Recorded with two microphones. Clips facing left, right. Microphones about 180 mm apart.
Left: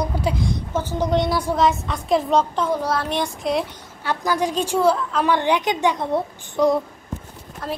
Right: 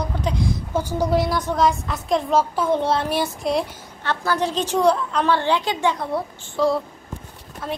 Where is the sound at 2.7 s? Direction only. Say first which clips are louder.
Right 2 dB; 25° right (ahead or behind).